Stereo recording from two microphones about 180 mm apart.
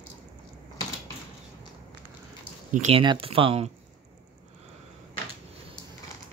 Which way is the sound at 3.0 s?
30° right (ahead or behind).